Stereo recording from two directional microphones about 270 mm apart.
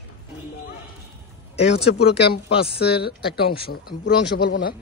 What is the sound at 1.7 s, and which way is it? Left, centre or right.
A man's voice, left.